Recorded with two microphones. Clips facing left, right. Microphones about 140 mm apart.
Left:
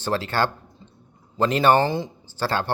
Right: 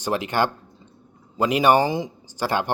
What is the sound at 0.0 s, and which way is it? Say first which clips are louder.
Speech: right 1 dB; 15° right (ahead or behind).